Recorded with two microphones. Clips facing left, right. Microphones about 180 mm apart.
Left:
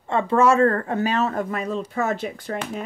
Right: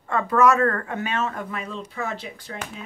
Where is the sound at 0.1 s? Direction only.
25° left (ahead or behind).